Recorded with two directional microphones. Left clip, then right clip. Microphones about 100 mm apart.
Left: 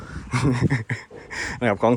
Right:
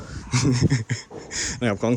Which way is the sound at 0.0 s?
20° right (ahead or behind).